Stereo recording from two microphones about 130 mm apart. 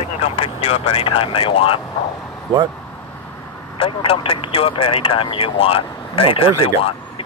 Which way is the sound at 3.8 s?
45° left (ahead or behind).